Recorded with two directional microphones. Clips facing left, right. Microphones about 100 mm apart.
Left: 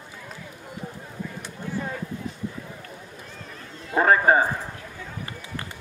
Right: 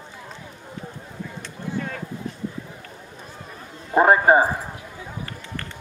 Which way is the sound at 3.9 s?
20° right (ahead or behind).